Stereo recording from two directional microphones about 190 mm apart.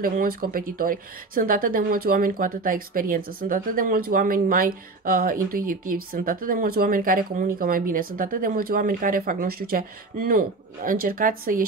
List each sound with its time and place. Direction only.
0.0 s speech: 50° right (ahead or behind)